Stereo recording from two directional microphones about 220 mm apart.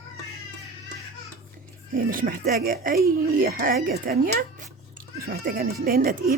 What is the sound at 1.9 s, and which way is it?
Speech, 40° right (ahead or behind).